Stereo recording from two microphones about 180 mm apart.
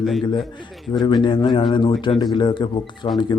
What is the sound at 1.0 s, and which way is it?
Speech, 25° left (ahead or behind).